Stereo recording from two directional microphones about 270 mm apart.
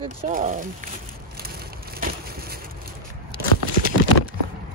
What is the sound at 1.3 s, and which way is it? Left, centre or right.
Vehicle, right.